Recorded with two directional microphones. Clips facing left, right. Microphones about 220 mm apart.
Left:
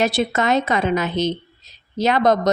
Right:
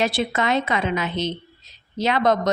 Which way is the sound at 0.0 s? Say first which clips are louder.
Left 3 dB; 45° left (ahead or behind).